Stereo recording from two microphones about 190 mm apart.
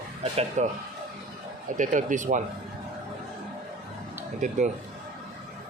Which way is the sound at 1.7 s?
40° right (ahead or behind).